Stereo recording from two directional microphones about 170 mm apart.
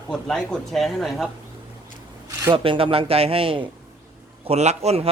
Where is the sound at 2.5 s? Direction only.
30° right (ahead or behind).